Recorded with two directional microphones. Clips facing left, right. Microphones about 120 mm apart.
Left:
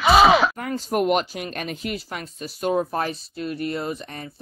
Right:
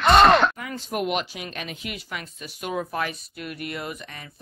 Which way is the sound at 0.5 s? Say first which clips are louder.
Left 6 dB; 45° left (ahead or behind).